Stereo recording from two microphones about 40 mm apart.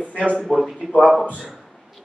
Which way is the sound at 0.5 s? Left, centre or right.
Centre.